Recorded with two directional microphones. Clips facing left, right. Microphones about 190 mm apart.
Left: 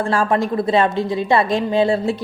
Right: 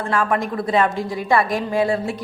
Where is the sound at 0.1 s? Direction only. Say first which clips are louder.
Even; 30° left (ahead or behind).